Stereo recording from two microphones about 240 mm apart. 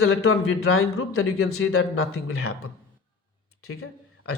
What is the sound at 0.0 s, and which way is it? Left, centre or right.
A man's voice, left.